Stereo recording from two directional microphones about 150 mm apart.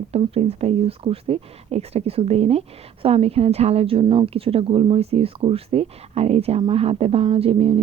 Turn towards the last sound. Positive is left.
turn(degrees=-40)  # may be behind; listen again after turning